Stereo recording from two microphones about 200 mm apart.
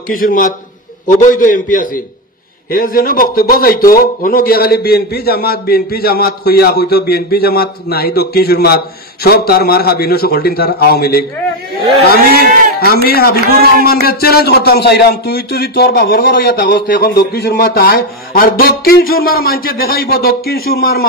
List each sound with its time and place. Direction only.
0.1 s a man's voice: 45° left (ahead or behind)
12.4 s a man's voice: 50° left (ahead or behind)